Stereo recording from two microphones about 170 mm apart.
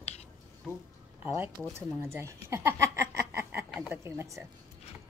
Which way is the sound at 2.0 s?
15° right (ahead or behind).